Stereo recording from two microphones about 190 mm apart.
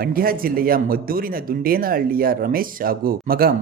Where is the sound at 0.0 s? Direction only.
50° right (ahead or behind).